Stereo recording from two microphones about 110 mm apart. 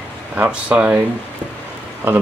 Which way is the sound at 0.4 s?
15° right (ahead or behind).